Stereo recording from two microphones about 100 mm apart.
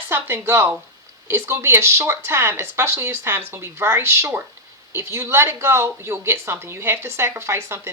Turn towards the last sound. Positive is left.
turn(degrees=-25)  # may be behind; listen again after turning